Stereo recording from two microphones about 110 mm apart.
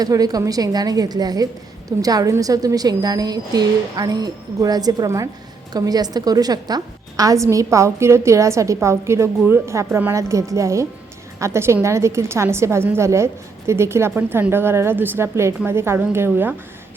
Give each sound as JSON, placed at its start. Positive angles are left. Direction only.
{"t": 0.0, "sound": "a woman's voice", "side_deg": -35}